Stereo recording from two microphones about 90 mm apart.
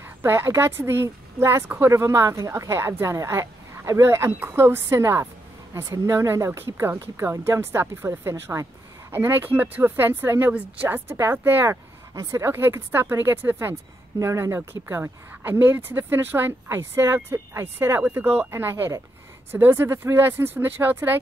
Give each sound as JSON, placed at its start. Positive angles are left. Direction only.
{"t": 0.0, "sound": "a woman's voice", "side_deg": -25}
{"t": 12.1, "sound": "speech", "side_deg": -40}